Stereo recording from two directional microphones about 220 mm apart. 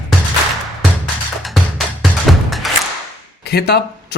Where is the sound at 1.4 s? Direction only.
Centre (ahead or behind).